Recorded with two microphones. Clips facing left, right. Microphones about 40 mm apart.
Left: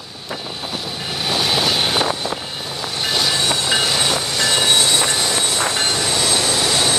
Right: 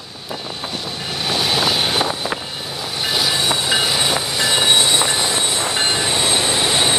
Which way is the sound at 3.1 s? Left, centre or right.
Centre.